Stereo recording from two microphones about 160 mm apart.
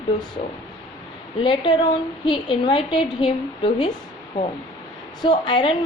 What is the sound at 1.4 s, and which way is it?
A woman's voice, 30° left (ahead or behind).